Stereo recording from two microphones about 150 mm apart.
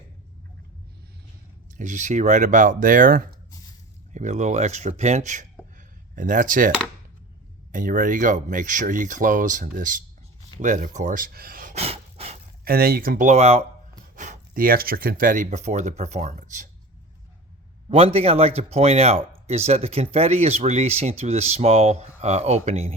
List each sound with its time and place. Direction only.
1.8 s speech: 55° right (ahead or behind)
4.1 s speech: 55° right (ahead or behind)
5.7 s a sound: 60° right (ahead or behind)
7.7 s speech: 60° right (ahead or behind); by 11.7 s 80° right
11.7 s a sound: 40° right (ahead or behind)
12.6 s speech: 85° right; by 13.7 s 45° right (ahead or behind)
14.2 s speech: 60° right (ahead or behind)
17.8 s speech: 45° right (ahead or behind)